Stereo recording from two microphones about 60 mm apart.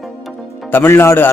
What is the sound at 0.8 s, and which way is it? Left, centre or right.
Speech, left.